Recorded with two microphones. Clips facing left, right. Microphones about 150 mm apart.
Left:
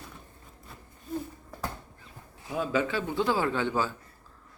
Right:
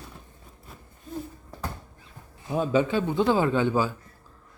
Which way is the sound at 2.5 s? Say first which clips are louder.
Right 5 dB; 30° right (ahead or behind).